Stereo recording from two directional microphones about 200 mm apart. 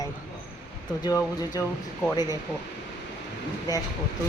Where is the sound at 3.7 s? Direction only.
20° left (ahead or behind).